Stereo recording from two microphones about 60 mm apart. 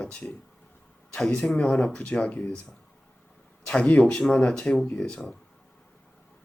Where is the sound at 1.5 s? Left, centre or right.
Centre.